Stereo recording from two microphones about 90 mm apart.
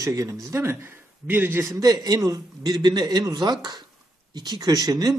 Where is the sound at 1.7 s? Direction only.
45° right (ahead or behind).